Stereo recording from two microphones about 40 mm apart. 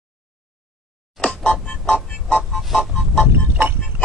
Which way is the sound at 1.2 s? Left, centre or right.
Left.